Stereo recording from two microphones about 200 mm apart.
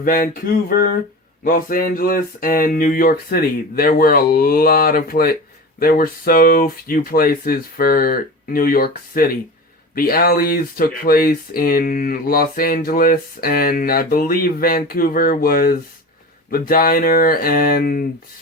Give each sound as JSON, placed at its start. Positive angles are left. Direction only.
{"t": 0.0, "sound": "speech", "side_deg": 45}
{"t": 1.5, "sound": "speech", "side_deg": 45}